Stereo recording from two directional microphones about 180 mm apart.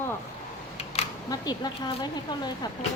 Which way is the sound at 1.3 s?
20° left (ahead or behind).